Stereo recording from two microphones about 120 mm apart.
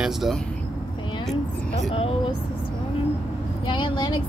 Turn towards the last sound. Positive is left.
turn(degrees=40)  # may be behind; listen again after turning